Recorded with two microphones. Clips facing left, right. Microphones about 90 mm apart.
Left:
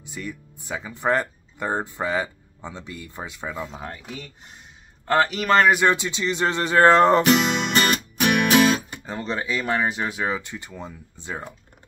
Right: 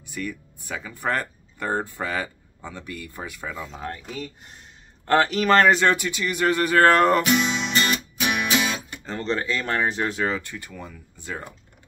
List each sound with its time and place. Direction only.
0.0 s speech: 20° left (ahead or behind)
3.7 s speech: 5° left (ahead or behind)
5.8 s speech: 20° left (ahead or behind)
7.2 s music: 55° left (ahead or behind)
9.0 s speech: 10° left (ahead or behind)